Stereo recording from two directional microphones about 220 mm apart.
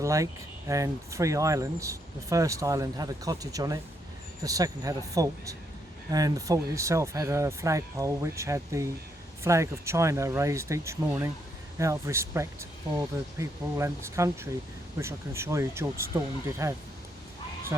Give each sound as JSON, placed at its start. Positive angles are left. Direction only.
{"t": 0.0, "sound": "speech", "side_deg": -15}